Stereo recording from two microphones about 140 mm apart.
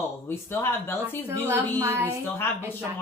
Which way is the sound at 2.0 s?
15° left (ahead or behind).